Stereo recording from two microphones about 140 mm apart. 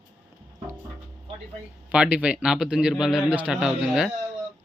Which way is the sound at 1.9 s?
10° right (ahead or behind).